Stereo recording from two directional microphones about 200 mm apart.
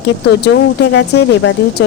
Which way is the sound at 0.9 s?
60° left (ahead or behind).